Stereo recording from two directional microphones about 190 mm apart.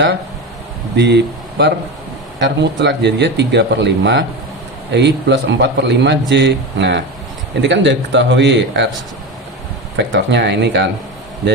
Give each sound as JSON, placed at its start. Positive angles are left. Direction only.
{"t": 0.9, "sound": "speech", "side_deg": -65}
{"t": 10.0, "sound": "speech", "side_deg": -65}